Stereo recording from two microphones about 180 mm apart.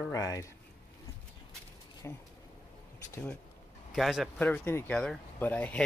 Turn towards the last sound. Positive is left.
turn(degrees=5)  # may be behind; listen again after turning